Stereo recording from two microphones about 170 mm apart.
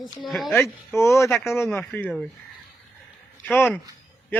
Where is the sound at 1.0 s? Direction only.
15° left (ahead or behind).